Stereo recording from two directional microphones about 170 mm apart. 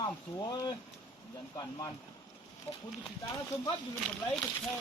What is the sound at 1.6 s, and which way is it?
Speech, 20° left (ahead or behind).